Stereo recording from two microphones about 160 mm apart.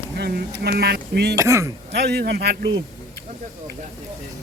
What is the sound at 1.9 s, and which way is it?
Speech, 85° right.